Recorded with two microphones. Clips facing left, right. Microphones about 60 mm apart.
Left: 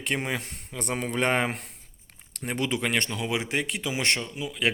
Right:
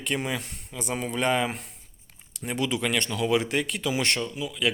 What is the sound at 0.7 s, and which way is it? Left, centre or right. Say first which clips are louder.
Speech: left 1 dB; left.